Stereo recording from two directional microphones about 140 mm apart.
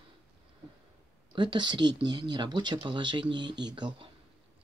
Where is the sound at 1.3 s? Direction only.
35° right (ahead or behind).